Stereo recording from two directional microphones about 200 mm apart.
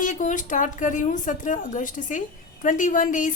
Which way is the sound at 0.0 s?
40° left (ahead or behind).